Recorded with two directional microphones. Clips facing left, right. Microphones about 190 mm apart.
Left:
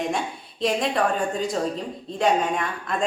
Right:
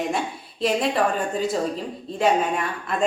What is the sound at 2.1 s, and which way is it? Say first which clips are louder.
Speech: right 1 dB; 5° right (ahead or behind).